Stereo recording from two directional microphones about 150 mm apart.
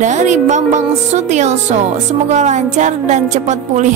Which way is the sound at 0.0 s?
55° right (ahead or behind).